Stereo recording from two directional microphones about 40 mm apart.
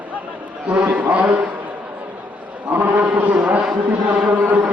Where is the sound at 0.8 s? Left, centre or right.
Right.